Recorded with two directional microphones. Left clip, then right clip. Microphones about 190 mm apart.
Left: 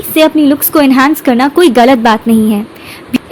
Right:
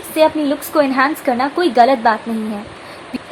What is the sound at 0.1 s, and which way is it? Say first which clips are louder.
A woman's voice: left 6 dB; 35° left (ahead or behind).